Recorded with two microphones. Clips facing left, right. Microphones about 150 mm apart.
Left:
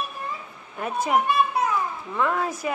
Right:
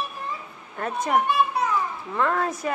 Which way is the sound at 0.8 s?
5° left (ahead or behind).